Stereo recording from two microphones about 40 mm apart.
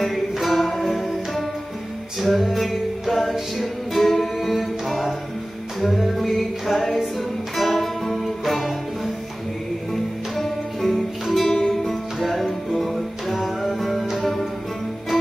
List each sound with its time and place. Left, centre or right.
0.0 s music: centre
10.3 s music: centre